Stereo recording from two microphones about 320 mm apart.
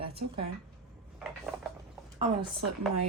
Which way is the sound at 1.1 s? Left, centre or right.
Centre.